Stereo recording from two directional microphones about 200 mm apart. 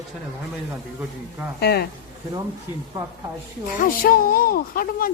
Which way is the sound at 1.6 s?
50° left (ahead or behind).